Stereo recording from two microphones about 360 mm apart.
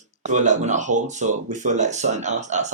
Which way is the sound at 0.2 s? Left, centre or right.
Centre.